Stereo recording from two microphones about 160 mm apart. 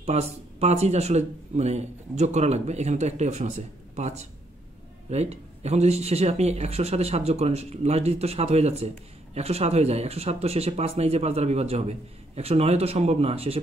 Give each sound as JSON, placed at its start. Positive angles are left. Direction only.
{"t": 0.0, "sound": "speech", "side_deg": -40}